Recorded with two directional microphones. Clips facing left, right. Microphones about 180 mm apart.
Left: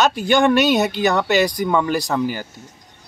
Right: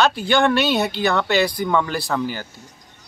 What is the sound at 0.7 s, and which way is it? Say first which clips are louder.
Speech: left 3 dB; 45° left (ahead or behind).